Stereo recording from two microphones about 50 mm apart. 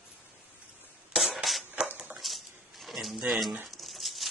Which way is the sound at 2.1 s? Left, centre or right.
Centre.